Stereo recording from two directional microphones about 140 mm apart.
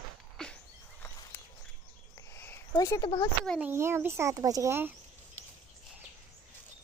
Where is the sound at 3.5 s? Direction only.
15° right (ahead or behind).